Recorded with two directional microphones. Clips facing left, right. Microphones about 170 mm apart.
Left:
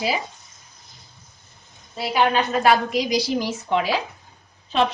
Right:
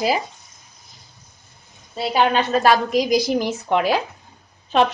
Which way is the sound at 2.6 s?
45° right (ahead or behind).